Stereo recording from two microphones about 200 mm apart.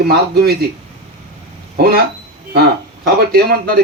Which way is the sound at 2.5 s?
55° right (ahead or behind).